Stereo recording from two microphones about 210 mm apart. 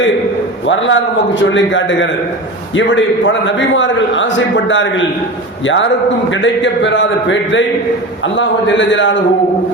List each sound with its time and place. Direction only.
0.7 s a man's voice: 60° left (ahead or behind)